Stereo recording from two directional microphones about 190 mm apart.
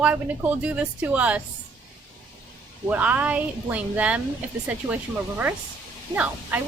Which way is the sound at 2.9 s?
10° right (ahead or behind).